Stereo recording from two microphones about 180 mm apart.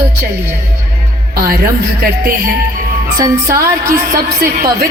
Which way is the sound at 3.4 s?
55° right (ahead or behind).